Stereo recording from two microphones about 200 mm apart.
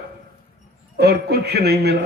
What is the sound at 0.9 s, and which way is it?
A man's voice, 55° right (ahead or behind).